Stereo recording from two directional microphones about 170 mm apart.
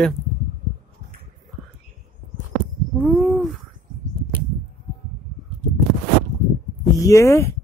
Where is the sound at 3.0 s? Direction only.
Centre (ahead or behind).